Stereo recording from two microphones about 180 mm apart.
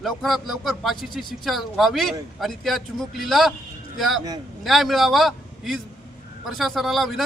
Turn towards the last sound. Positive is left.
turn(degrees=0)  # may be behind; listen again after turning